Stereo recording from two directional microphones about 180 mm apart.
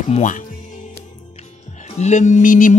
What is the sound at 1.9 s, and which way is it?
Speech, 40° left (ahead or behind).